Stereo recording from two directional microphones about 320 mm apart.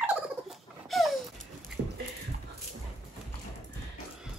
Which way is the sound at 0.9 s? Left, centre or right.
Centre.